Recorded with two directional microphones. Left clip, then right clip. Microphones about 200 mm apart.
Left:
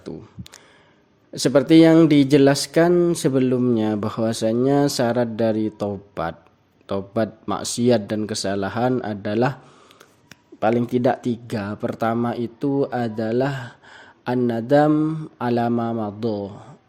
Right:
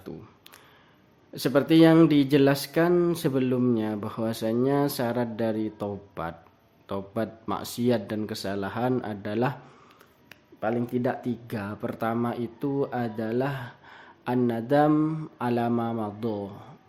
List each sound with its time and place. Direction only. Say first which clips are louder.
1.3 s speech: left 7 dB; 25° left (ahead or behind)
3.8 s speech: left 7 dB; 30° left (ahead or behind)
10.6 s speech: left 8 dB; 40° left (ahead or behind); by 16.6 s 20° left (ahead or behind)